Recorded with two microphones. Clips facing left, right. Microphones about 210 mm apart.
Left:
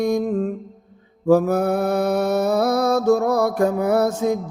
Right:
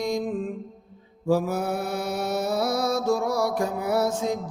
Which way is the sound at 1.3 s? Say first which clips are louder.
Left 7 dB; 60° left (ahead or behind).